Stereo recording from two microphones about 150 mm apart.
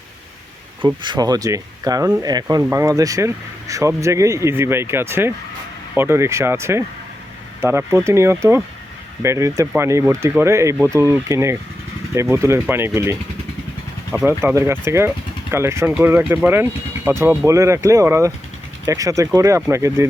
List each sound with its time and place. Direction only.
1.0 s speech: 30° right (ahead or behind)